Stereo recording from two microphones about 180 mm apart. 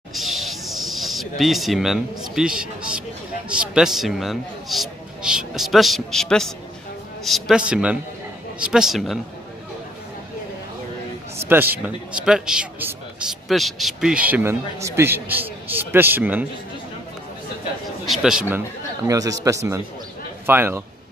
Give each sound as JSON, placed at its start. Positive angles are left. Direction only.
{"t": 0.1, "sound": "a sound", "side_deg": 0}
{"t": 3.4, "sound": "a man's voice", "side_deg": -5}
{"t": 11.3, "sound": "a man's voice", "side_deg": -10}
{"t": 18.0, "sound": "a man's voice", "side_deg": 0}
{"t": 19.0, "sound": "a man's voice", "side_deg": -20}